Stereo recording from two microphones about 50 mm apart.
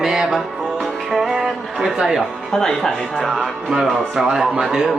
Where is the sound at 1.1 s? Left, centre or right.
Centre.